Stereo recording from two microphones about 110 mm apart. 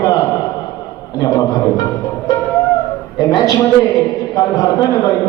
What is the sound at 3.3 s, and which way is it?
A man's voice, 35° left (ahead or behind).